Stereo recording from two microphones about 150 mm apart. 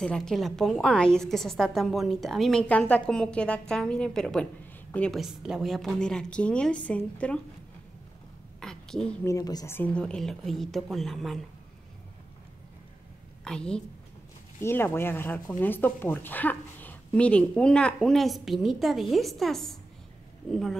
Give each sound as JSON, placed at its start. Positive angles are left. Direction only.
{"t": 0.0, "sound": "a woman's voice", "side_deg": 5}
{"t": 5.2, "sound": "a woman's voice", "side_deg": -5}
{"t": 8.5, "sound": "a sound", "side_deg": 5}
{"t": 9.2, "sound": "a woman's voice", "side_deg": 20}
{"t": 9.8, "sound": "a woman's voice", "side_deg": 10}
{"t": 13.4, "sound": "a woman's voice", "side_deg": 5}
{"t": 14.6, "sound": "a woman's voice", "side_deg": 15}